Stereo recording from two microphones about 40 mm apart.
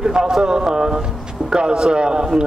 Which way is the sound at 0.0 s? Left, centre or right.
Centre.